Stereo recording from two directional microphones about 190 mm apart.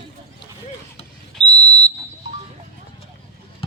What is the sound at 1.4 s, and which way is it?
Whistle, 35° left (ahead or behind).